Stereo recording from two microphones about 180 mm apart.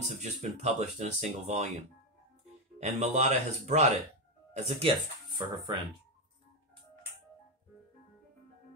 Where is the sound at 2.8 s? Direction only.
40° right (ahead or behind).